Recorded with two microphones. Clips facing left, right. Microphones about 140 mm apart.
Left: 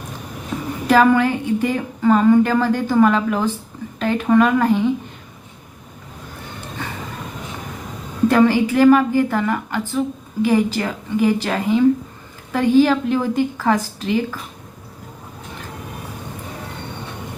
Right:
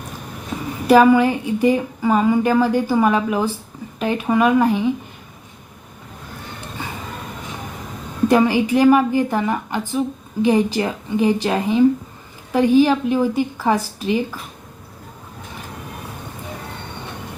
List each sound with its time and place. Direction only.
0.9 s speech: 15° right (ahead or behind)
8.3 s a woman's voice: 15° right (ahead or behind)